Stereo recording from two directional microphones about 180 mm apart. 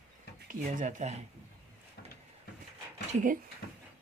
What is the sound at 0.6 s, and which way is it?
Speech, 45° right (ahead or behind).